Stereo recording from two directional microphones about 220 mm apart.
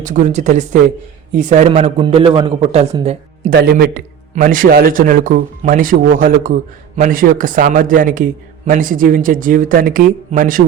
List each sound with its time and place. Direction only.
0.0 s a man's voice: 35° right (ahead or behind)
3.5 s a man's voice: 45° right (ahead or behind)